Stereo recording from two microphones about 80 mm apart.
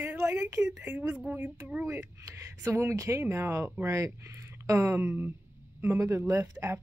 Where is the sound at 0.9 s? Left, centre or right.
Centre.